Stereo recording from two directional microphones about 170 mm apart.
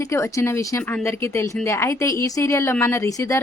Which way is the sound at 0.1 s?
15° left (ahead or behind).